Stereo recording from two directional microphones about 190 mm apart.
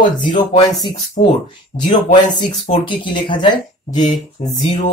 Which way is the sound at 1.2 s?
25° left (ahead or behind).